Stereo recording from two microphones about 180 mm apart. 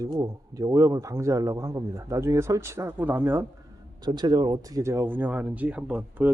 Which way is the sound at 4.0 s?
25° right (ahead or behind).